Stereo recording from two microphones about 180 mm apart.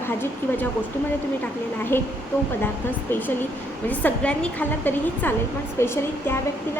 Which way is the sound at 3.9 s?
10° left (ahead or behind).